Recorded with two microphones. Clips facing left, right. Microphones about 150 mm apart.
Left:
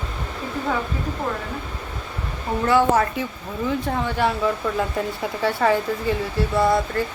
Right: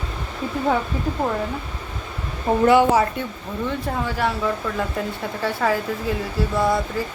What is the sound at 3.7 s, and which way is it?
Speech, centre (ahead or behind).